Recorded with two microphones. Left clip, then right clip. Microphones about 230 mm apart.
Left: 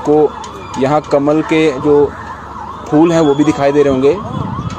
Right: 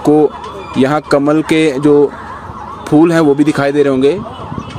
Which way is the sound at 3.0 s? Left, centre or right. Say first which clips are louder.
Even; right.